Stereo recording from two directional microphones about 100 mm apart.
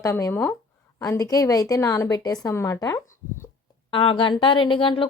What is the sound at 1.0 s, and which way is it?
Speech, 35° left (ahead or behind).